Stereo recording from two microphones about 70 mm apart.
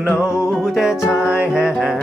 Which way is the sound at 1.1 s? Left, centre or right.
Centre.